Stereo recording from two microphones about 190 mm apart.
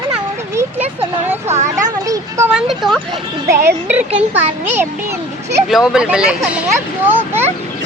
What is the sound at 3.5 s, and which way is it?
Speech, 10° right (ahead or behind).